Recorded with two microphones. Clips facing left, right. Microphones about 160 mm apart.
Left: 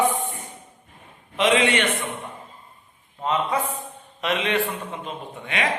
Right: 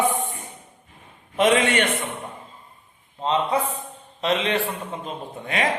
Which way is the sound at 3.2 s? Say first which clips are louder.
Right 2 dB; 25° right (ahead or behind).